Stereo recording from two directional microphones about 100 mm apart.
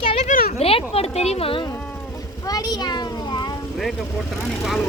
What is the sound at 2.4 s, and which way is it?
A child's voice, 40° left (ahead or behind).